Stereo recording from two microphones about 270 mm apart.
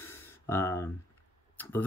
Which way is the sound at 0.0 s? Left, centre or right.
Centre.